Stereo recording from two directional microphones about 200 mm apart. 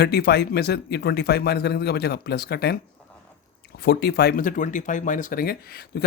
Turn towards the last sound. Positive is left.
turn(degrees=50)  # may be behind; listen again after turning